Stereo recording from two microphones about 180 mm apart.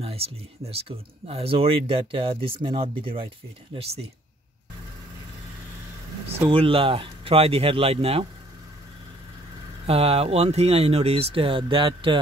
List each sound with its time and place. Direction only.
0.0 s speech: 35° right (ahead or behind)
6.5 s speech: 30° right (ahead or behind)
9.8 s speech: 35° right (ahead or behind)